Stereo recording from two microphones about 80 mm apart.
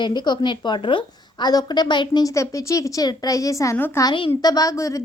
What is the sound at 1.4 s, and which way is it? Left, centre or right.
Speech, left.